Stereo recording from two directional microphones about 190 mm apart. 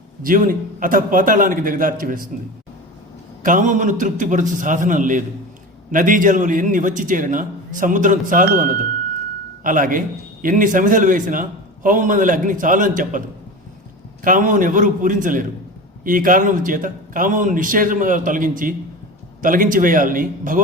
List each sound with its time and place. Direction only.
0.2 s a man's voice: 45° right (ahead or behind)
3.4 s a man's voice: 45° right (ahead or behind)
14.3 s a man's voice: 45° right (ahead or behind)